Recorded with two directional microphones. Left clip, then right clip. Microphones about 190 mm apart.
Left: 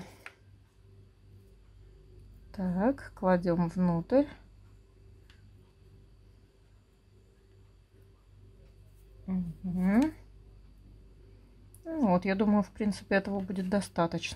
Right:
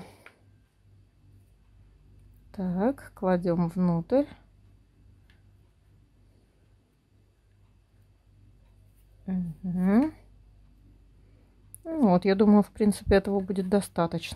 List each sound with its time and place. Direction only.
2.5 s a woman's voice: 20° right (ahead or behind)
9.8 s speech: 30° right (ahead or behind)
11.8 s speech: 35° right (ahead or behind)